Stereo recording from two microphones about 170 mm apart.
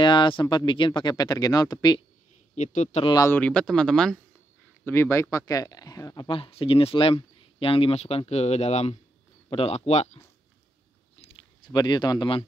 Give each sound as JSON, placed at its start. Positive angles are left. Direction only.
{"t": 0.0, "sound": "speech", "side_deg": 30}
{"t": 2.5, "sound": "speech", "side_deg": 45}
{"t": 3.1, "sound": "speech", "side_deg": 20}
{"t": 3.3, "sound": "speech", "side_deg": 5}
{"t": 4.8, "sound": "speech", "side_deg": 15}
{"t": 11.1, "sound": "chewing", "side_deg": 30}